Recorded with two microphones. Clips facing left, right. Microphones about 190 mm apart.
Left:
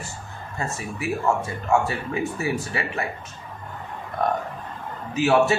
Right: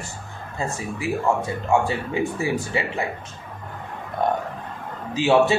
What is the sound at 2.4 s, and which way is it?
Speech, 25° right (ahead or behind).